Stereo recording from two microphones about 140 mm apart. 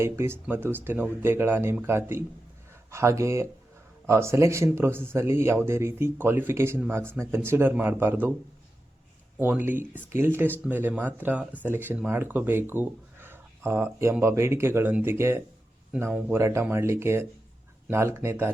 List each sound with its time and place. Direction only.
0.0 s speech: 20° right (ahead or behind)
9.4 s speech: 15° right (ahead or behind)